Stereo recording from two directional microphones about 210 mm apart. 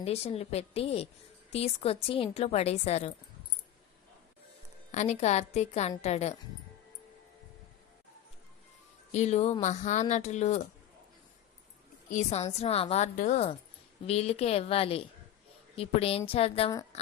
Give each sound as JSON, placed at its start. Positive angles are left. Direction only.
{"t": 0.0, "sound": "a woman's voice", "side_deg": 30}
{"t": 4.9, "sound": "speech", "side_deg": 35}
{"t": 9.1, "sound": "speech", "side_deg": 35}
{"t": 12.0, "sound": "a woman's voice", "side_deg": 35}